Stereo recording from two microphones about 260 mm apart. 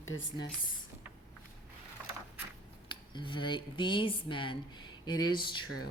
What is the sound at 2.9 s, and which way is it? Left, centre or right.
Speech, centre.